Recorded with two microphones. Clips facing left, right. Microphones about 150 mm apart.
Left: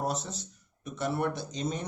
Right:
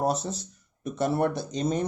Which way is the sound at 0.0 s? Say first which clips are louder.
Right 6 dB; 35° right (ahead or behind).